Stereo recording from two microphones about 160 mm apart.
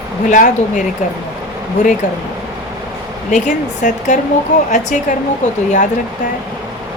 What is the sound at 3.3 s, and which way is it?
Speech, 50° left (ahead or behind).